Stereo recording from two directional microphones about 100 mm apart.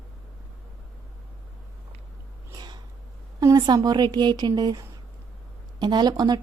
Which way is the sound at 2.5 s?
45° right (ahead or behind).